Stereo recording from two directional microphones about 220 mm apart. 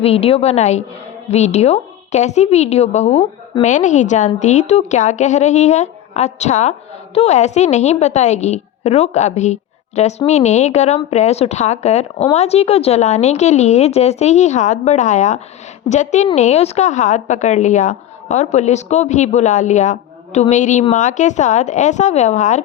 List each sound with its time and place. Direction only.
0.0 s a woman's voice: 25° left (ahead or behind)